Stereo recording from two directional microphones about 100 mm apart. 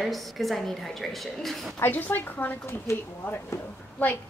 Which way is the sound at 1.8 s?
15° left (ahead or behind).